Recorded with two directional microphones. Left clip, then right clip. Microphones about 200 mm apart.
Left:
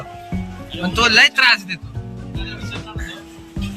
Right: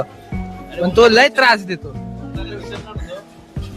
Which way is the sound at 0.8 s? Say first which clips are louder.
Right 3 dB; 15° right (ahead or behind).